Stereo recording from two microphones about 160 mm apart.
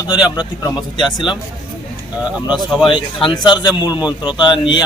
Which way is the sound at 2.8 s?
30° left (ahead or behind).